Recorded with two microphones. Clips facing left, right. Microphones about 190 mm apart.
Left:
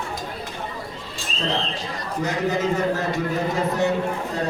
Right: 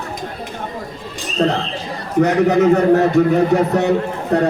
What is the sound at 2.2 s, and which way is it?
A man's voice, 65° right (ahead or behind).